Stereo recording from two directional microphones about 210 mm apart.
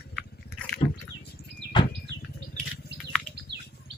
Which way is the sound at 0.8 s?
25° left (ahead or behind).